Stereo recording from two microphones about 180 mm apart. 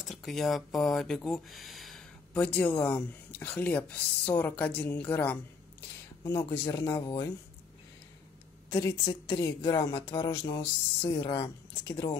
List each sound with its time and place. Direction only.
0.1 s speech: centre (ahead or behind)
6.2 s a woman's voice: 20° left (ahead or behind)
8.6 s a woman's voice: 20° left (ahead or behind)